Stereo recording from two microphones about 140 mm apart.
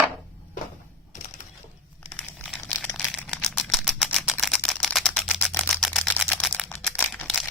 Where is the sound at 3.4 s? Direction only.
5° left (ahead or behind).